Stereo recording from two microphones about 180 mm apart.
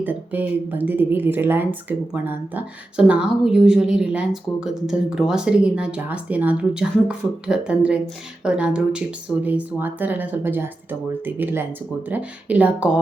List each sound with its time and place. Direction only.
0.0 s speech: 10° right (ahead or behind)